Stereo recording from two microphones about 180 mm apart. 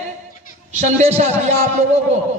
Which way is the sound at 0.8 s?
40° right (ahead or behind).